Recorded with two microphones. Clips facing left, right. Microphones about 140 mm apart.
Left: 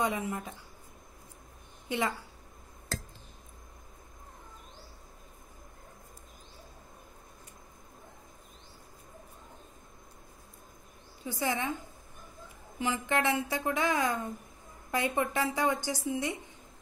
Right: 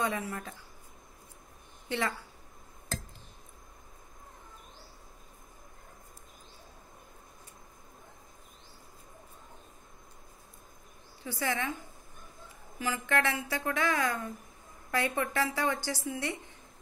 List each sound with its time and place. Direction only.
0.0 s speech: 15° left (ahead or behind)
1.9 s speech: 15° left (ahead or behind)
11.2 s a woman's voice: 20° left (ahead or behind)
12.7 s a woman's voice: 20° left (ahead or behind)